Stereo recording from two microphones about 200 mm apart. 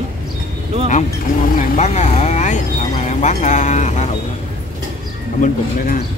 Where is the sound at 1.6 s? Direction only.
35° left (ahead or behind).